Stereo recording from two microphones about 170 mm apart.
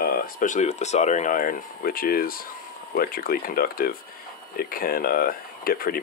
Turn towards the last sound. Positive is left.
turn(degrees=60)  # may be behind; listen again after turning